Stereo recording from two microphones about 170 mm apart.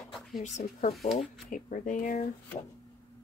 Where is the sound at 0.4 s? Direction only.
45° left (ahead or behind).